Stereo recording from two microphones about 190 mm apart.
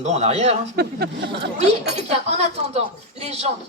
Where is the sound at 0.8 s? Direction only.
55° right (ahead or behind).